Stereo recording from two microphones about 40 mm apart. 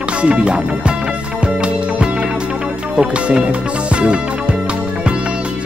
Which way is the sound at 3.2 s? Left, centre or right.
Right.